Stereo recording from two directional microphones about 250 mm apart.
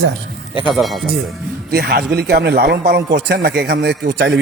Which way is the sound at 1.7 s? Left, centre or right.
Right.